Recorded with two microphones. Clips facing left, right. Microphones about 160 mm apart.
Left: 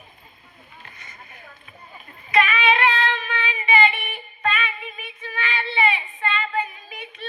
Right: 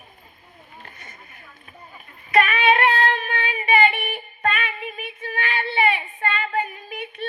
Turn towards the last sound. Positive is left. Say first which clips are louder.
# right 6 dB
turn(degrees=-55)  # may be behind; listen again after turning